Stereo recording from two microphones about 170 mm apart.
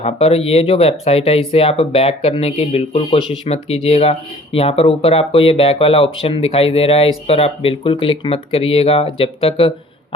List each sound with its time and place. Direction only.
0.0 s speech: 35° left (ahead or behind)